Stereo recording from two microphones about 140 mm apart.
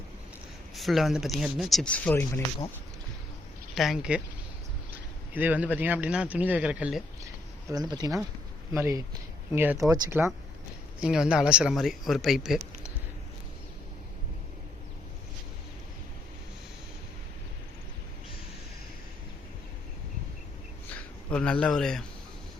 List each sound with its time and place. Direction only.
0.8 s speech: centre (ahead or behind)
3.8 s a man's voice: 5° right (ahead or behind)
7.7 s speech: 30° right (ahead or behind)
9.5 s speech: 10° right (ahead or behind)
11.0 s speech: 5° right (ahead or behind)
20.9 s a sound: 10° left (ahead or behind)